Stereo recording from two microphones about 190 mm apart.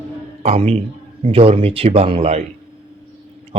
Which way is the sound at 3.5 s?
30° right (ahead or behind).